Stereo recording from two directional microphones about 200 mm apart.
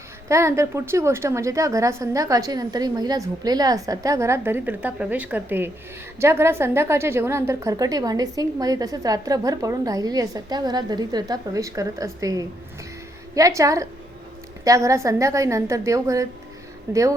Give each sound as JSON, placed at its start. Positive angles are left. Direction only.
{"t": 0.3, "sound": "a woman's voice", "side_deg": -15}